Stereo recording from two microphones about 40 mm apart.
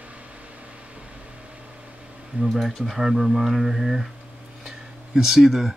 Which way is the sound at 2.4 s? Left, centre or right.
Centre.